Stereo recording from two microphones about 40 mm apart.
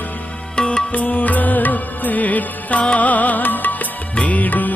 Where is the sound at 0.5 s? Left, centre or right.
Left.